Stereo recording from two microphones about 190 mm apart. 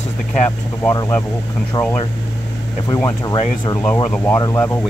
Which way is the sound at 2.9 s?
20° left (ahead or behind).